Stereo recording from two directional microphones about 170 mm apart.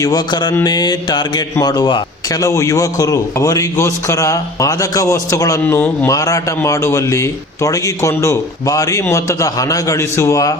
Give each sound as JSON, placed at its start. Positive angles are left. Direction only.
{"t": 0.0, "sound": "a man's voice", "side_deg": 25}
{"t": 6.1, "sound": "a man's voice", "side_deg": 20}